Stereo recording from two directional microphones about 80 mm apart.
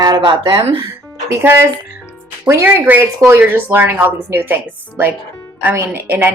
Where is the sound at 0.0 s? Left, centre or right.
Right.